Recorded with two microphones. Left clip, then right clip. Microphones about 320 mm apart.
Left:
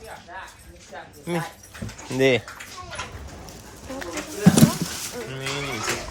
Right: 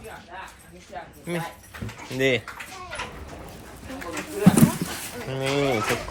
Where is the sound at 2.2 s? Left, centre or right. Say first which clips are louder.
Left 3 dB; centre.